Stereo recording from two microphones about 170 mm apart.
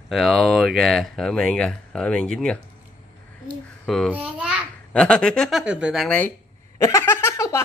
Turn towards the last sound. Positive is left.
turn(degrees=15)  # may be behind; listen again after turning